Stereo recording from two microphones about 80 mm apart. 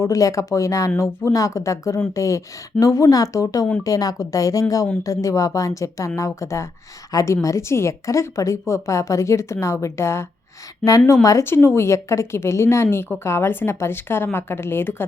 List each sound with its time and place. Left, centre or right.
0.0 s a woman's voice: left
11.4 s a woman's voice: left